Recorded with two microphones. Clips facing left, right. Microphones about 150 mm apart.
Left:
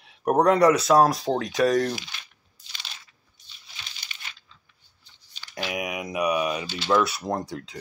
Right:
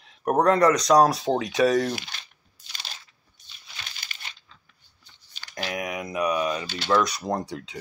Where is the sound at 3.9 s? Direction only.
55° right (ahead or behind).